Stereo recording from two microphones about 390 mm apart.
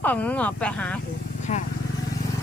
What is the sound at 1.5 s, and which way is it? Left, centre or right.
Speech, centre.